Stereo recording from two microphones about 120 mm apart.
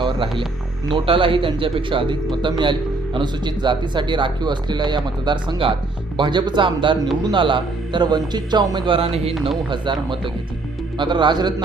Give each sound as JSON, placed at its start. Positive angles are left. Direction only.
{"t": 0.0, "sound": "music", "side_deg": -45}
{"t": 0.9, "sound": "speech", "side_deg": -45}
{"t": 9.6, "sound": "speech", "side_deg": -40}